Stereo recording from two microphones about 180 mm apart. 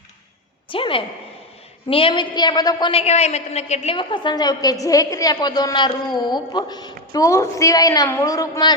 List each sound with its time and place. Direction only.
0.7 s a woman's voice: 30° left (ahead or behind)